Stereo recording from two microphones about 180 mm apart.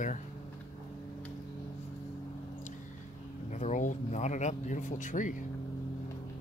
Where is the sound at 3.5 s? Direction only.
40° left (ahead or behind).